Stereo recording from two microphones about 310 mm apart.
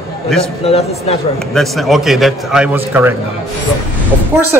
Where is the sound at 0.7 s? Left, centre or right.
Centre.